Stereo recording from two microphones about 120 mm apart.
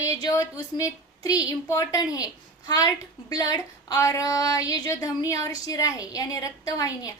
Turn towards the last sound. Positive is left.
turn(degrees=30)  # may be behind; listen again after turning